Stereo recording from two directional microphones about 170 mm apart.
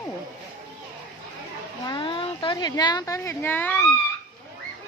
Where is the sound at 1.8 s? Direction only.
30° left (ahead or behind); by 3.9 s 10° left (ahead or behind).